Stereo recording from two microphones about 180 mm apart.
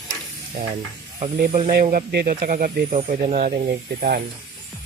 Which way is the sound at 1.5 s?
40° right (ahead or behind).